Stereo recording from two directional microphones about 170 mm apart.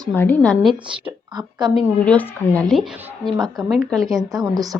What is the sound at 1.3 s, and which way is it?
Speech, 25° right (ahead or behind).